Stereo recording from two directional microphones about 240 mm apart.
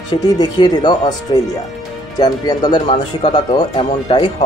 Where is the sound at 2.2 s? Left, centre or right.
Centre.